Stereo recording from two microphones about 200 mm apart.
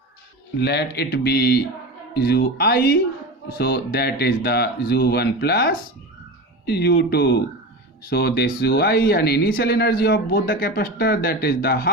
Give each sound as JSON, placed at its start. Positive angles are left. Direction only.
{"t": 0.6, "sound": "speech", "side_deg": 55}